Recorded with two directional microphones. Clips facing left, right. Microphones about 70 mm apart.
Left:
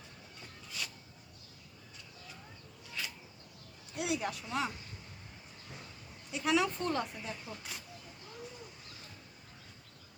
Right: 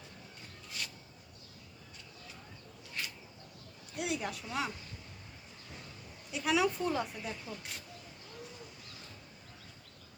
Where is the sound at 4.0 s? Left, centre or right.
Centre.